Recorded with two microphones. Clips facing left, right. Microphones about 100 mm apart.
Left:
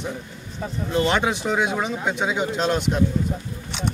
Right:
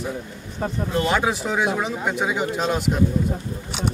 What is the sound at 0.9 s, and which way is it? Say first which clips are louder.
Speech: left 1 dB; 5° right (ahead or behind).